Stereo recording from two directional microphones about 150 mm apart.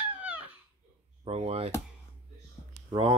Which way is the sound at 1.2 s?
40° right (ahead or behind).